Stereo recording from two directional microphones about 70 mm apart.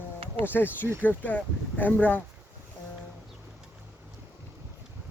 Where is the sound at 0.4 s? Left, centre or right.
Left.